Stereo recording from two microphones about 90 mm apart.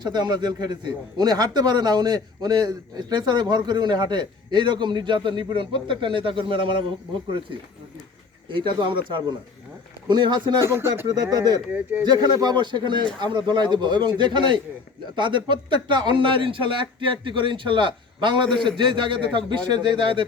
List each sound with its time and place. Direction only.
0.0 s a man's voice: 50° right (ahead or behind); by 6.8 s 70° right (ahead or behind)
8.5 s speech: 65° right (ahead or behind)
10.7 s speech: 25° right (ahead or behind)
11.1 s a man's voice: 50° right (ahead or behind)
11.7 s speech: 20° right (ahead or behind)
12.0 s speech: 50° right (ahead or behind)